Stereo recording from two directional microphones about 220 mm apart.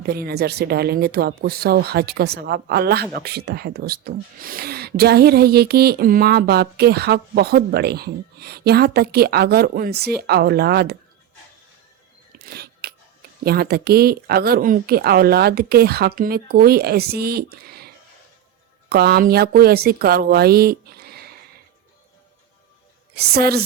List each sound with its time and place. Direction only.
0.1 s speech: 45° right (ahead or behind)
12.8 s a sound: 45° right (ahead or behind)
13.4 s speech: 45° right (ahead or behind)
23.1 s speech: 45° right (ahead or behind)